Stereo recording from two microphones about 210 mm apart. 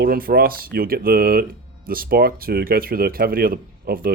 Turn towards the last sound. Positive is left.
turn(degrees=-45)  # may be behind; listen again after turning